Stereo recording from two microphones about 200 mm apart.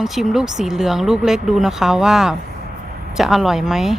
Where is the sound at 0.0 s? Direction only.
Centre (ahead or behind).